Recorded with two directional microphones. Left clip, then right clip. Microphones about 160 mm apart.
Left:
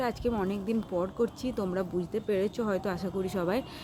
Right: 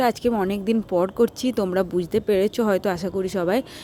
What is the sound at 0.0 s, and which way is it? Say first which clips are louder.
A woman's voice: right 9 dB; 55° right (ahead or behind).